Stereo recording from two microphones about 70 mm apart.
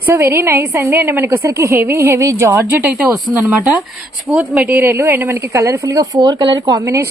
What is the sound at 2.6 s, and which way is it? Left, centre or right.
Speech, right.